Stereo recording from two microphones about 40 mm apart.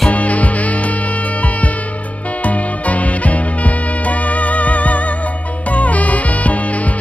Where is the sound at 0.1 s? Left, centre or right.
Left.